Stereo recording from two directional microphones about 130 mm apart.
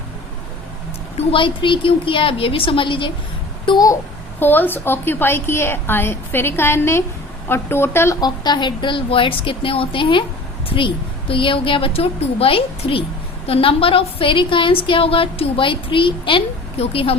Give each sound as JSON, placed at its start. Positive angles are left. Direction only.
{"t": 1.1, "sound": "a woman's voice", "side_deg": 40}
{"t": 3.7, "sound": "speech", "side_deg": 30}
{"t": 4.4, "sound": "a woman's voice", "side_deg": 15}
{"t": 8.2, "sound": "a woman's voice", "side_deg": 35}